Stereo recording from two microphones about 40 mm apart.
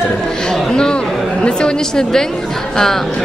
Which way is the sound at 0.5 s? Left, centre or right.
Centre.